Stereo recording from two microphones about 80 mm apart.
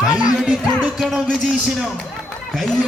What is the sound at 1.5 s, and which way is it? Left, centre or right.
Speech, centre.